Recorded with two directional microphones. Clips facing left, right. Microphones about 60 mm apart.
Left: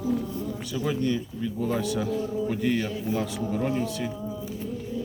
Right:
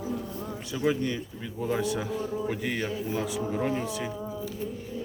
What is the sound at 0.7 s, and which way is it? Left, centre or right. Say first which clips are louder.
A man's voice: even; centre.